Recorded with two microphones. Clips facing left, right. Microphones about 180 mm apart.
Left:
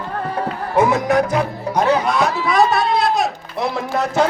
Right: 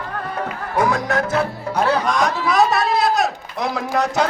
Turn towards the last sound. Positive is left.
turn(degrees=0)  # may be behind; listen again after turning